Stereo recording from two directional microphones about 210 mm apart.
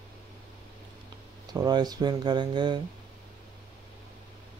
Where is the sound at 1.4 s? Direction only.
20° right (ahead or behind).